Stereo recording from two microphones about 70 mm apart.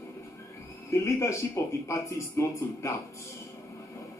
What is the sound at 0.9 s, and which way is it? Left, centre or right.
A man's voice, left.